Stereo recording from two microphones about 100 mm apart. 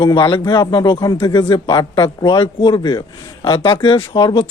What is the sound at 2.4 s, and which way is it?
Speech, 65° left (ahead or behind).